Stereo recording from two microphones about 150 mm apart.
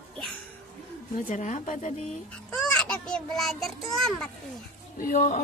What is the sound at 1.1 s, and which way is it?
Speech, 55° left (ahead or behind).